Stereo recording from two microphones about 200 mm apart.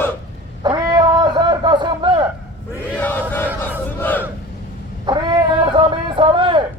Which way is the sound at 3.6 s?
10° left (ahead or behind).